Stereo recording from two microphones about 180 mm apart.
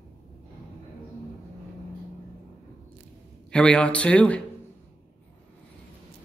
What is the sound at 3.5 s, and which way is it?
Speech, 5° left (ahead or behind).